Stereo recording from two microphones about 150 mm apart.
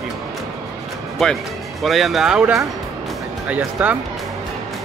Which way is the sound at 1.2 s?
Centre (ahead or behind).